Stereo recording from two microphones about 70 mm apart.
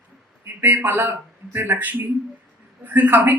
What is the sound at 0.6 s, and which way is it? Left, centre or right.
Speech, right.